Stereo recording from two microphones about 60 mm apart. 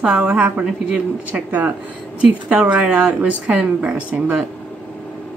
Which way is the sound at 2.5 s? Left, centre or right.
Right.